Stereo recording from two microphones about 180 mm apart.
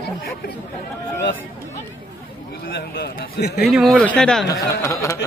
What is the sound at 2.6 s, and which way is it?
A man's voice, 60° left (ahead or behind).